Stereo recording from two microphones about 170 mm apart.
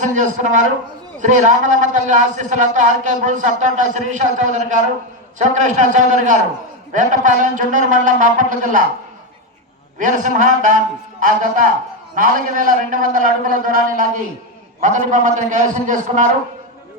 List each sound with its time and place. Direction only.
0.0 s a man's voice: 45° right (ahead or behind)
10.0 s a man's voice: 50° right (ahead or behind)